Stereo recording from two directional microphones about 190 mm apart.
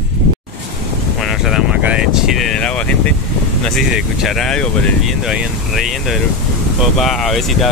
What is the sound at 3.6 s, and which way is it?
Speech, centre (ahead or behind).